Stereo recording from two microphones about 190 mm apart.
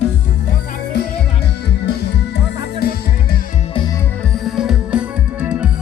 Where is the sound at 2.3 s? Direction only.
55° left (ahead or behind).